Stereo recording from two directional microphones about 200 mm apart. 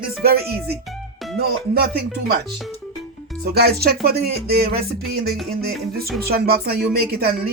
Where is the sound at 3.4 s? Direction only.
50° right (ahead or behind).